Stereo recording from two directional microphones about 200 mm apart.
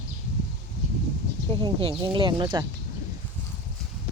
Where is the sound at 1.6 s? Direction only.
25° right (ahead or behind).